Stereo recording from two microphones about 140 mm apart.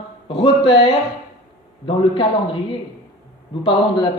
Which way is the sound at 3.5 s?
40° left (ahead or behind).